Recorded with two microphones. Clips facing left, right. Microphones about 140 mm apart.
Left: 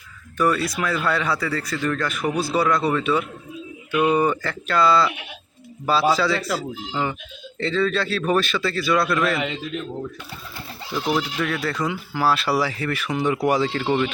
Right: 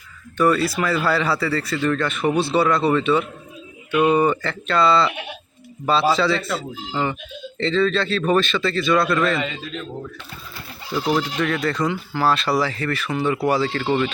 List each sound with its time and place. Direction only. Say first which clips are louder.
0.3 s a man's voice: right 3 dB; centre (ahead or behind)
2.3 s speech: right 3 dB; 30° right (ahead or behind)
2.6 s a man's voice: right 1 dB; centre (ahead or behind)
10.9 s speech: right 2 dB; centre (ahead or behind)